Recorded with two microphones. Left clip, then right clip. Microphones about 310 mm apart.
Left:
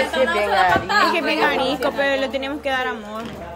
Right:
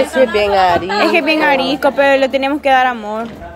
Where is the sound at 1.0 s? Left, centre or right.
Centre.